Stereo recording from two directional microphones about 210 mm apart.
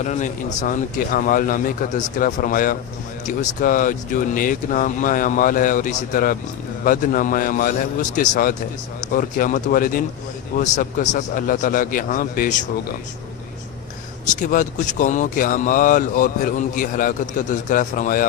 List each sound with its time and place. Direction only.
0.0 s speech: 35° left (ahead or behind)
14.3 s speech: 40° left (ahead or behind)